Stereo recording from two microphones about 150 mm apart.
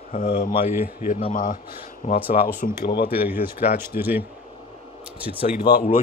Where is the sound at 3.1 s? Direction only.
10° right (ahead or behind).